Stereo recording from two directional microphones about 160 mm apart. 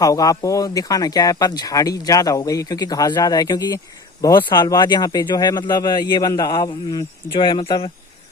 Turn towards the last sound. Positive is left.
turn(degrees=30)  # may be behind; listen again after turning